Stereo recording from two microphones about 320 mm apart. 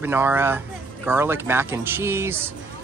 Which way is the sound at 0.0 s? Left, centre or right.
Centre.